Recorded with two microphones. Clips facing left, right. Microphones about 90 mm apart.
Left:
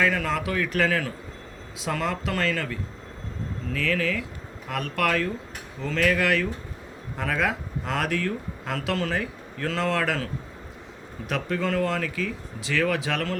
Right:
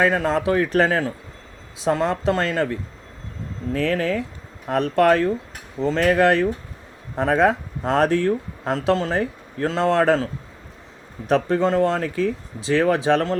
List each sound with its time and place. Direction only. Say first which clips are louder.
0.0 s speech: right 6 dB; 35° right (ahead or behind)
11.3 s speech: right 8 dB; 35° right (ahead or behind)